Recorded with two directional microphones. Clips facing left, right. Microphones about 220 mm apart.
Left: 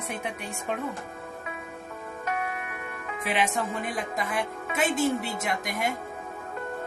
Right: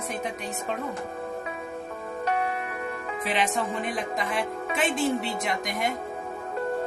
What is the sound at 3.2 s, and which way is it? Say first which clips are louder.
Speech: even; 10° left (ahead or behind).